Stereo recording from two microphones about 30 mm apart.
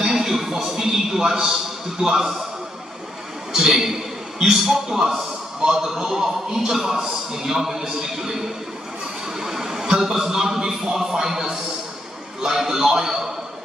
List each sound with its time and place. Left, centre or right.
0.0 s a sound: centre
2.0 s a man's voice: centre
3.5 s a man's voice: centre